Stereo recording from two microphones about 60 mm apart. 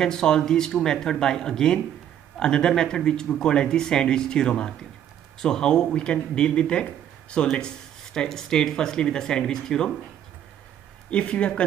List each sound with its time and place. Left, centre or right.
0.0 s speech: centre
11.1 s speech: centre